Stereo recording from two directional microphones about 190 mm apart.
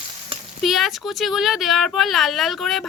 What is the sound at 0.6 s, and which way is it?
Speech, centre (ahead or behind).